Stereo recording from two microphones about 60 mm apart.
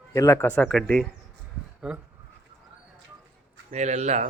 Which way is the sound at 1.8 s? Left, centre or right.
Centre.